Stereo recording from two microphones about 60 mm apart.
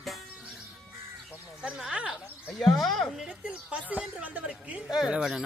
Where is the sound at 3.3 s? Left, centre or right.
Right.